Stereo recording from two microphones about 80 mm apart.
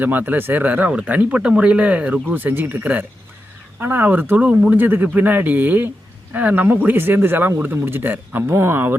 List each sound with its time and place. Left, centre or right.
0.0 s speech: right